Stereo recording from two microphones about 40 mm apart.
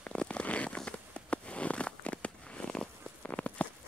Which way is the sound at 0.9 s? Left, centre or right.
Left.